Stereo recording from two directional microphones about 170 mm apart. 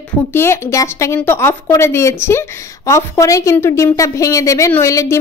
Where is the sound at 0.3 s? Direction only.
15° left (ahead or behind).